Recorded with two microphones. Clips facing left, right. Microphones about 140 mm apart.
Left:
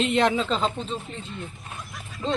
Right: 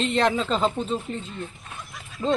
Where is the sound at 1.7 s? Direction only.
Centre (ahead or behind).